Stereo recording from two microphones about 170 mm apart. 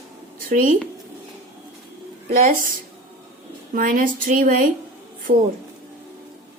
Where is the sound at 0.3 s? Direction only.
55° right (ahead or behind).